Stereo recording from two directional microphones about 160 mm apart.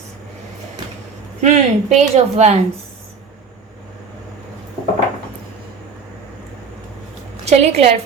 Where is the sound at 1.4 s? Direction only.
45° right (ahead or behind).